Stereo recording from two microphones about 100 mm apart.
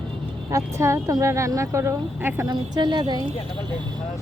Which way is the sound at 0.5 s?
30° right (ahead or behind).